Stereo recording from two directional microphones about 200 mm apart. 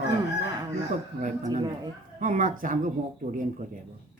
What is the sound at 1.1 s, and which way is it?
Speech, 40° right (ahead or behind).